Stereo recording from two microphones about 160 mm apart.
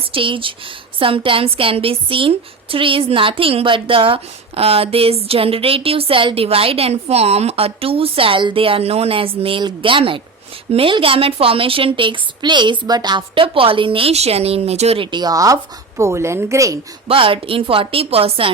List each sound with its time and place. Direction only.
0.0 s a woman's voice: 35° right (ahead or behind)
17.1 s a woman's voice: 35° right (ahead or behind)